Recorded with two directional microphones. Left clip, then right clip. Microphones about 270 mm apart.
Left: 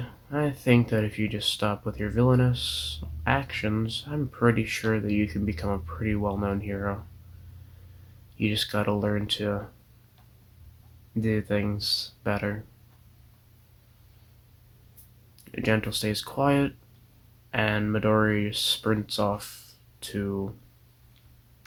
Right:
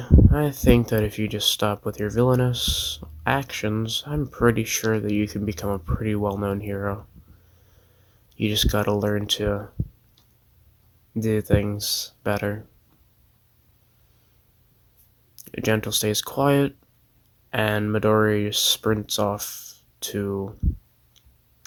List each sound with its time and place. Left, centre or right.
0.0 s speech: right
8.4 s speech: right
11.1 s speech: right
15.4 s speech: right